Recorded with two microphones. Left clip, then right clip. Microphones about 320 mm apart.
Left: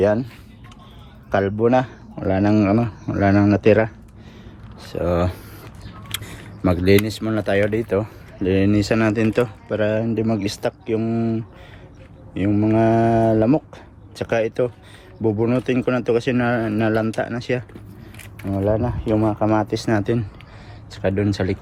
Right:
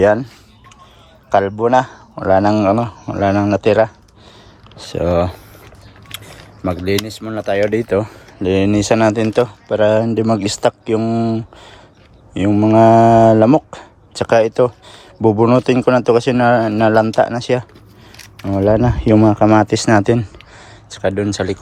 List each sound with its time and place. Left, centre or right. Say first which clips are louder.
0.0 s speech: right 6 dB; right
1.3 s speech: right 5 dB; centre
4.8 s speech: right 5 dB; right; by 7.6 s centre
7.6 s speech: right 5 dB; right
8.4 s speech: right 4 dB; centre
18.5 s speech: right 7 dB; right